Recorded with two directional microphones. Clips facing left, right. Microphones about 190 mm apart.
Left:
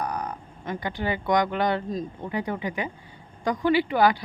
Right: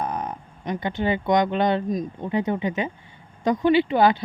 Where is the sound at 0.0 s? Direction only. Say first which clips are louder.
Right 2 dB; 20° right (ahead or behind).